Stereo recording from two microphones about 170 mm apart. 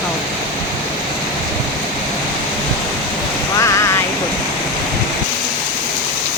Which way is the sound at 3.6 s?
15° left (ahead or behind).